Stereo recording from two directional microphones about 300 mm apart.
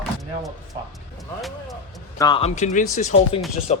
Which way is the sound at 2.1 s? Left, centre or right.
Centre.